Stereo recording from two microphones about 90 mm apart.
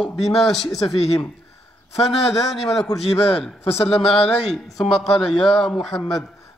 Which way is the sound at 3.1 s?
90° left.